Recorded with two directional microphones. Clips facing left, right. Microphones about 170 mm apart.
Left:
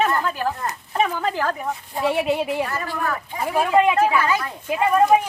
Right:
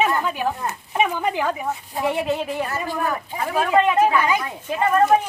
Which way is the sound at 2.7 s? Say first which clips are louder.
Right 1 dB; 15° right (ahead or behind).